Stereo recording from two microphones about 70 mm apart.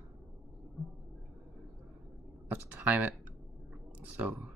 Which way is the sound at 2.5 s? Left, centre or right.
Right.